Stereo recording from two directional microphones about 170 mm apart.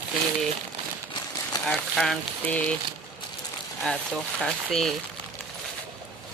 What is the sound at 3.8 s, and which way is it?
Speech, 5° left (ahead or behind).